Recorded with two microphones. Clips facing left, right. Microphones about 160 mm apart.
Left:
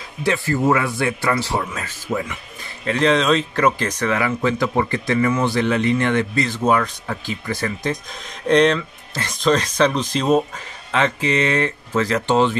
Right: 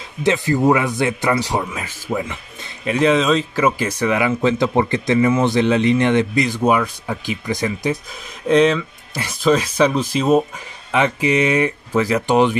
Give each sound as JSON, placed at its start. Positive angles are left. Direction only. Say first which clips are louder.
{"t": 0.2, "sound": "speech", "louder": "right 3 dB", "side_deg": -20}